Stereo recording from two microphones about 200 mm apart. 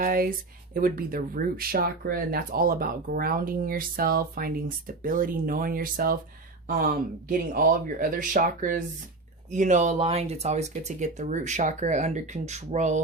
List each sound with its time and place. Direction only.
0.0 s speech: 45° right (ahead or behind)